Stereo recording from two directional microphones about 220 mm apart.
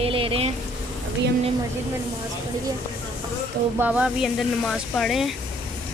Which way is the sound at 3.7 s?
5° right (ahead or behind).